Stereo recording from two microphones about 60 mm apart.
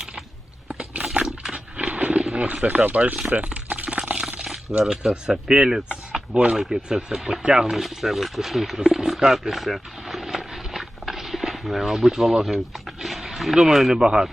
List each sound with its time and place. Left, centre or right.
0.7 s biting: centre
1.1 s wild animals: centre
2.6 s liquid: right
4.3 s a sound: centre
4.8 s speech: centre